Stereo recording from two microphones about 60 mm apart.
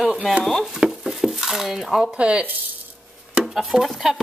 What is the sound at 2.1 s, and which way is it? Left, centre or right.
Speech, centre.